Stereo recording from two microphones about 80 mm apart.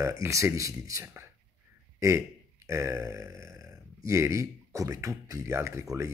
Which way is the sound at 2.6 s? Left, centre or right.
Right.